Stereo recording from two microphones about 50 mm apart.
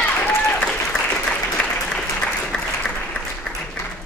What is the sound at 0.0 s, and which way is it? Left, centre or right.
Applause, left.